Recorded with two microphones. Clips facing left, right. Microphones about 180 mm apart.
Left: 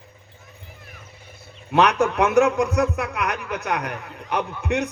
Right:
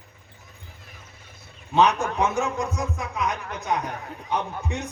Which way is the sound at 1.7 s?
65° left (ahead or behind).